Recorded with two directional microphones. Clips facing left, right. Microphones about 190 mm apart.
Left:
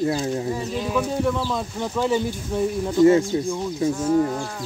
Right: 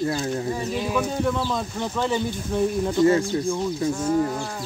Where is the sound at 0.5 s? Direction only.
5° right (ahead or behind).